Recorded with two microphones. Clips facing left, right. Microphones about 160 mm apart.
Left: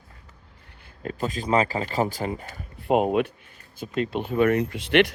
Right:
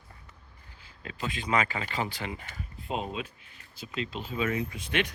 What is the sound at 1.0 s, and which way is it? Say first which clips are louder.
Speech: left 7 dB; 40° left (ahead or behind).